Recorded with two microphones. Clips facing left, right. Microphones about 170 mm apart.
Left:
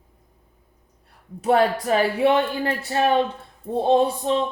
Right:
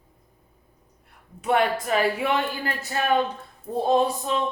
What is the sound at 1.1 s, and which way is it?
Speech, 35° left (ahead or behind).